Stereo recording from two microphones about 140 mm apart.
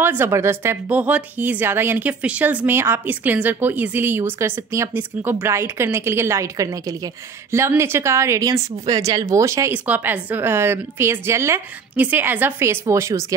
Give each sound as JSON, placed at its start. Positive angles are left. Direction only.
{"t": 0.0, "sound": "a woman's voice", "side_deg": -15}